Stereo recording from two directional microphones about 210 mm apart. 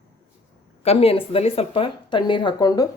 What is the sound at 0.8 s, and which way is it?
Speech, 30° left (ahead or behind).